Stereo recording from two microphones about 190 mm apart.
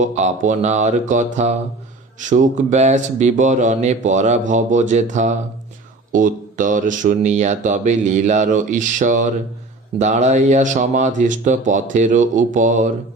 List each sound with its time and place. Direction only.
0.0 s speech: 40° right (ahead or behind)